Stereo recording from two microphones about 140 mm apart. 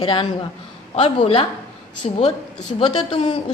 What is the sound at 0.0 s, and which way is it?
A woman's voice, 35° left (ahead or behind).